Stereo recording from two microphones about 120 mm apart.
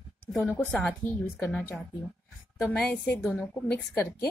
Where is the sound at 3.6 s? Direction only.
15° left (ahead or behind).